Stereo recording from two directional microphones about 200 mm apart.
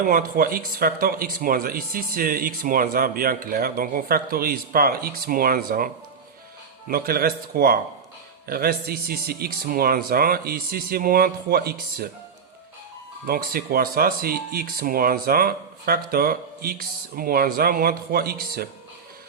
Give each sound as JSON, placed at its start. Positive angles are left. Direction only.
{"t": 0.1, "sound": "speech", "side_deg": -45}
{"t": 13.2, "sound": "speech", "side_deg": -50}